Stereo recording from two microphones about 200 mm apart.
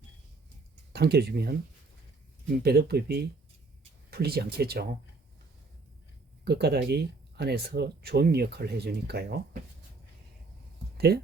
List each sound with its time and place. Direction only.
0.9 s speech: 55° right (ahead or behind)
2.6 s speech: 55° right (ahead or behind)
6.4 s speech: 55° right (ahead or behind)
10.9 s speech: 50° right (ahead or behind)